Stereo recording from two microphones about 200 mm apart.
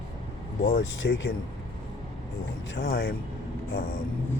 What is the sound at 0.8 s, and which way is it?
Speech, 75° left (ahead or behind).